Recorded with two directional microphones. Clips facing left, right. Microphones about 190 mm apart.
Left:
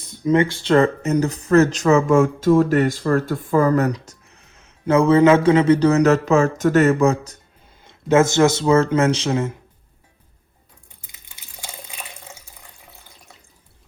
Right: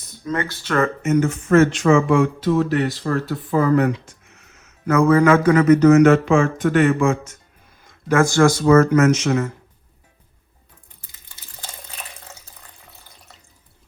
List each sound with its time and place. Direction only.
0.3 s speech: 25° left (ahead or behind); by 7.3 s 40° left (ahead or behind)
7.9 s speech: 25° left (ahead or behind)
11.0 s a sound: 15° left (ahead or behind)